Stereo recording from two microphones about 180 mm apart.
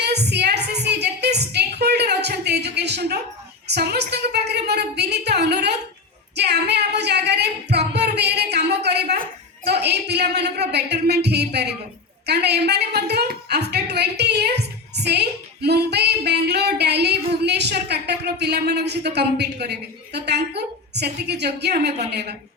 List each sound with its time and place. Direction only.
0.0 s a sound: 65° right (ahead or behind)
3.7 s a woman's voice: 65° right (ahead or behind)
6.3 s singing: 65° right (ahead or behind)
9.8 s a woman's voice: 65° right (ahead or behind)